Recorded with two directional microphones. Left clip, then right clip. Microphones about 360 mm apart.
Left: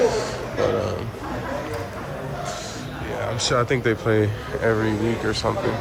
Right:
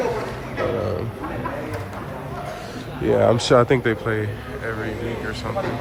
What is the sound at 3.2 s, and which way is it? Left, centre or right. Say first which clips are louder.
Speech: right 6 dB; centre.